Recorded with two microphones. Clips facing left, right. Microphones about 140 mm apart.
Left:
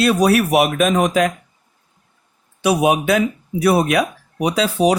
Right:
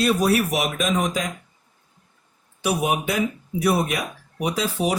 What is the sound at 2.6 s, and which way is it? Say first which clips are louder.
Speech: left 7 dB; 80° left.